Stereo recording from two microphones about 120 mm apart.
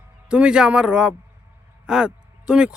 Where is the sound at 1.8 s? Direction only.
5° right (ahead or behind).